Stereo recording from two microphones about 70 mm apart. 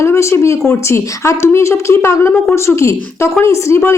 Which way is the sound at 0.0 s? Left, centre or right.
Left.